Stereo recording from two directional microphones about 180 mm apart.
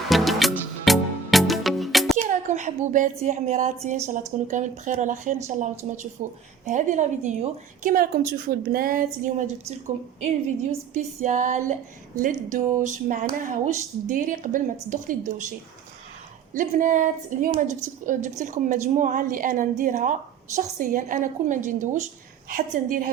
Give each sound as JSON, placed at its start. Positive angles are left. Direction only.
{"t": 0.1, "sound": "music", "side_deg": 0}
{"t": 2.1, "sound": "a woman's voice", "side_deg": -40}
{"t": 10.2, "sound": "female singing", "side_deg": -40}
{"t": 12.2, "sound": "a woman's voice", "side_deg": -45}
{"t": 16.6, "sound": "a woman's voice", "side_deg": -45}